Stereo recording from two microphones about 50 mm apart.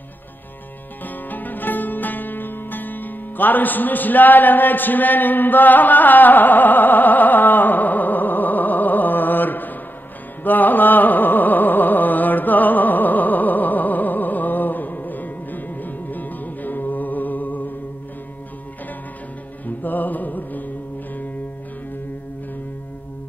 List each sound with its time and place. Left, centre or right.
1.0 s music: left
10.4 s carnatic music: left
19.6 s music: left